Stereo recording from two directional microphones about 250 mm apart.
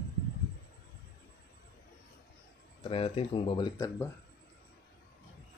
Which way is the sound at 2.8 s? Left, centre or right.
Left.